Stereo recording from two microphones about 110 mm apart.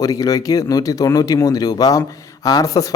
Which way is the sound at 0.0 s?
35° left (ahead or behind).